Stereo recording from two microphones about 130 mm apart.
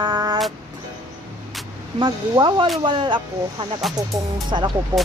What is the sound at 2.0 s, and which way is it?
Music, 35° right (ahead or behind).